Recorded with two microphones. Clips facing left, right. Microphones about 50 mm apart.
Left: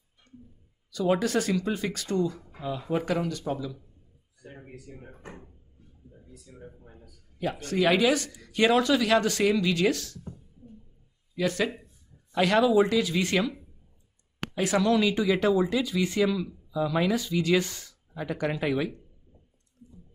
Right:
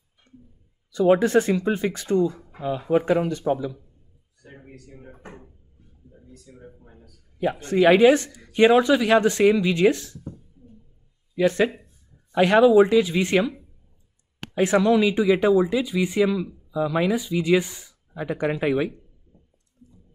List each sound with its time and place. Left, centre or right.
0.3 s a sound: right
0.9 s speech: right
4.6 s speech: centre
6.2 s speech: centre
7.3 s speech: right
11.3 s speech: right
14.6 s speech: right